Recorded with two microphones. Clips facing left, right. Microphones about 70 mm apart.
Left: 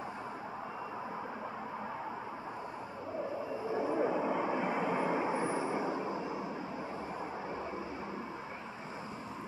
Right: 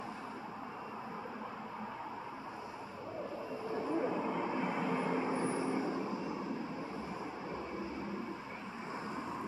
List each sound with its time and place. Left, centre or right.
4.0 s vehicle: left